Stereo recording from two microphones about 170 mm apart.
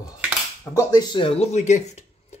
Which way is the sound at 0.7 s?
20° left (ahead or behind).